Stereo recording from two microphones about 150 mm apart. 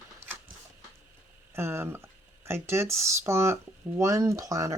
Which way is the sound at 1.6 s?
15° right (ahead or behind).